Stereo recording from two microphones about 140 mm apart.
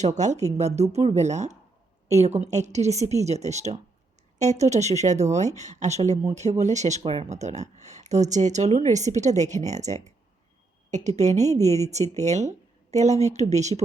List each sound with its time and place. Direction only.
0.0 s a woman's voice: 55° right (ahead or behind)